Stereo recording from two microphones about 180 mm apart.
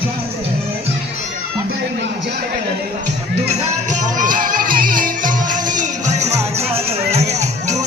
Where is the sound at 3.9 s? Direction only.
45° right (ahead or behind).